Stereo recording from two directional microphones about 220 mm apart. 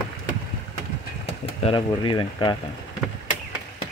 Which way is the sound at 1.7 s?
20° left (ahead or behind).